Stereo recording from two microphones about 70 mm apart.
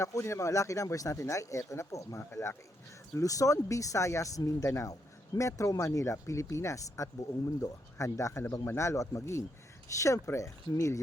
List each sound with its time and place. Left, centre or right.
0.0 s speech: left
3.2 s speech: left